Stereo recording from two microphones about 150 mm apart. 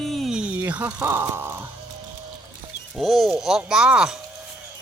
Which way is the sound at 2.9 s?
Centre (ahead or behind).